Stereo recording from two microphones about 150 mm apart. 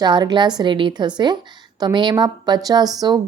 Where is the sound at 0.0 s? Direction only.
30° right (ahead or behind).